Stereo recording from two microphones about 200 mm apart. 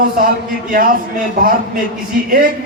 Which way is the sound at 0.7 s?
45° right (ahead or behind).